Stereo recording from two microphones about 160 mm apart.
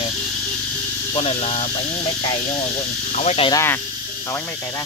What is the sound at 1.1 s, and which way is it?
Speech, 40° left (ahead or behind).